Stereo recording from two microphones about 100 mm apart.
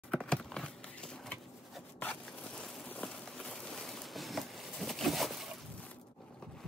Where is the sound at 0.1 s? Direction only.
10° left (ahead or behind).